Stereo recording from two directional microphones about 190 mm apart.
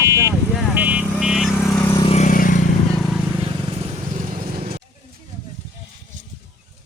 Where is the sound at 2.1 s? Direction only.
45° left (ahead or behind).